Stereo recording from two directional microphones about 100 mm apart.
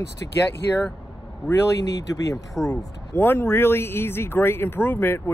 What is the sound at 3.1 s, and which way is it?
Speech, 25° left (ahead or behind).